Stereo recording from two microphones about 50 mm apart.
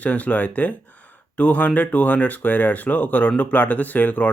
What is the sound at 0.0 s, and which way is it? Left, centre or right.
Speech, left.